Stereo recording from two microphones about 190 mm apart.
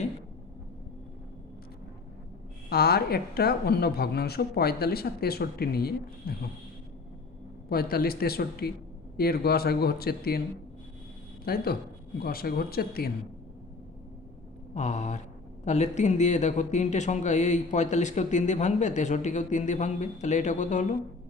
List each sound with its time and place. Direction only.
2.6 s a woman's voice: 55° left (ahead or behind)
7.7 s a woman's voice: 50° left (ahead or behind)
11.4 s a woman's voice: 55° left (ahead or behind)
14.8 s speech: 35° left (ahead or behind)